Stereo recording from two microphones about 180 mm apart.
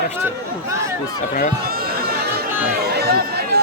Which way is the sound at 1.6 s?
55° right (ahead or behind).